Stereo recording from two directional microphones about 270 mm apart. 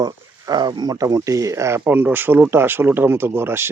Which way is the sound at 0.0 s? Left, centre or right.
Centre.